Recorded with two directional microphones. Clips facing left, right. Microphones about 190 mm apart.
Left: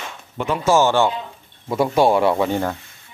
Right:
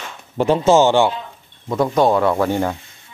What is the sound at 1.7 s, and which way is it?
Speech, 5° left (ahead or behind).